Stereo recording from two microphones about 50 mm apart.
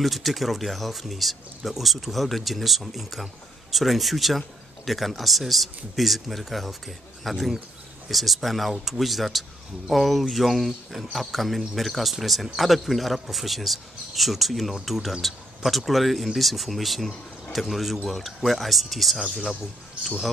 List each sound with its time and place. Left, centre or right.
0.0 s speech: centre